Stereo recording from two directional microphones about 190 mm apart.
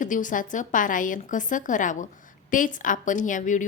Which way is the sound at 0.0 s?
45° left (ahead or behind).